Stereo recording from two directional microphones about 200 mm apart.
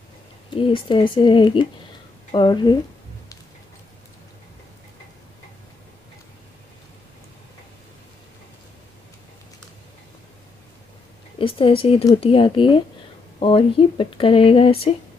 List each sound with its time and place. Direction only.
0.5 s speech: 25° left (ahead or behind)
11.3 s speech: 25° left (ahead or behind)